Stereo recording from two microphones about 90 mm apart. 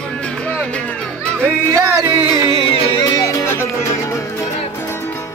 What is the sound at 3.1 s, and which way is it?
Music, 40° left (ahead or behind).